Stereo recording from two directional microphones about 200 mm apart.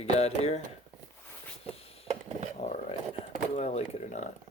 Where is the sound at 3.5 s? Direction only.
35° left (ahead or behind).